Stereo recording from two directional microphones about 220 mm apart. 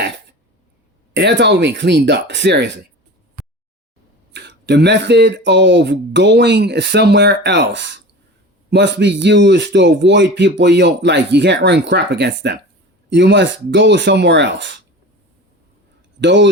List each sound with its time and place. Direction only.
1.1 s speech: 50° right (ahead or behind)
4.3 s speech: 50° right (ahead or behind)
16.2 s speech: 55° right (ahead or behind)